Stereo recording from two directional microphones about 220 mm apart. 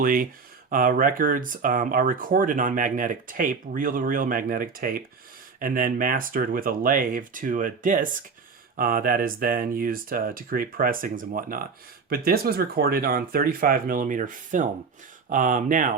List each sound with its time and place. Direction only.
0.0 s speech: 40° right (ahead or behind)